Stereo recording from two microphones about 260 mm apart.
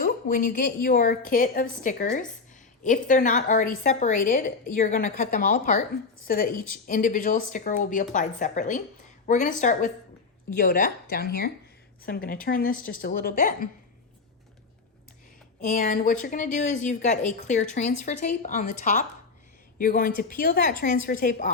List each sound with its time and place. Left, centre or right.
0.0 s a woman's voice: left
15.6 s a woman's voice: left